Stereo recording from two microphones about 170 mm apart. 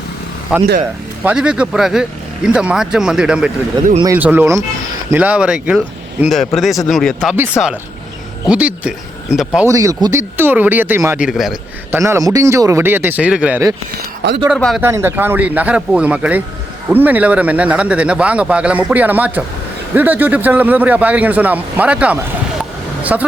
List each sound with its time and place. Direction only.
0.5 s speech: 5° right (ahead or behind)
7.6 s speech: 15° left (ahead or behind)
8.4 s speech: 5° right (ahead or behind)
9.6 s speech: 20° right (ahead or behind); by 11.5 s 5° right (ahead or behind)
11.9 s speech: 15° right (ahead or behind); by 14.8 s centre (ahead or behind)
14.8 s speech: 15° right (ahead or behind)